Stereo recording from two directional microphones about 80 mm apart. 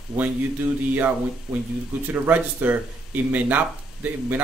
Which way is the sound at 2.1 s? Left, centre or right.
Centre.